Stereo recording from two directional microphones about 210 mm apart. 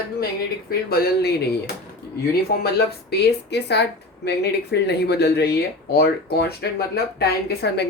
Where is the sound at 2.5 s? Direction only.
45° left (ahead or behind).